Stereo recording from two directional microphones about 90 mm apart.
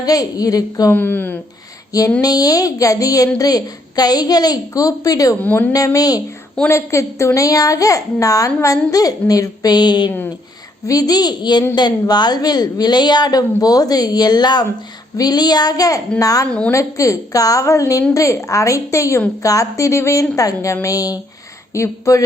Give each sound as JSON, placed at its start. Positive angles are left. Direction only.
{"t": 0.0, "sound": "a woman's voice", "side_deg": 45}
{"t": 0.9, "sound": "speech", "side_deg": 25}
{"t": 1.9, "sound": "a sound", "side_deg": 40}
{"t": 2.2, "sound": "a woman's voice", "side_deg": 45}
{"t": 5.4, "sound": "speech", "side_deg": 20}
{"t": 5.7, "sound": "a woman's voice", "side_deg": 40}
{"t": 16.5, "sound": "a woman's voice", "side_deg": 10}
{"t": 16.7, "sound": "a woman's voice", "side_deg": 40}